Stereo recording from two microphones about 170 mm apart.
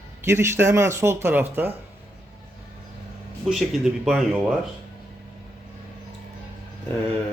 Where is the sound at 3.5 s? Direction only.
Centre (ahead or behind).